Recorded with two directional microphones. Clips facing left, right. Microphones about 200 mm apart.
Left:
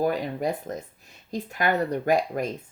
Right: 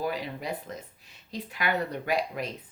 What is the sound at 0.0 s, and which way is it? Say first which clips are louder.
Speech: left 7 dB; 45° left (ahead or behind).